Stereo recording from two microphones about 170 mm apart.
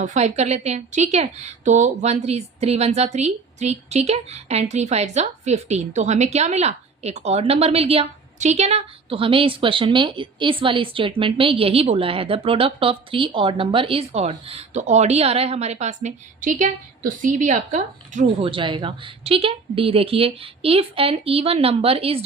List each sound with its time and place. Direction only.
0.0 s a woman's voice: 45° right (ahead or behind)
18.4 s a woman's voice: 30° right (ahead or behind)